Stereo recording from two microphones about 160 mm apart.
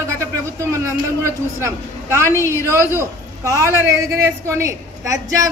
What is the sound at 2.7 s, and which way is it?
A man's voice, 15° right (ahead or behind).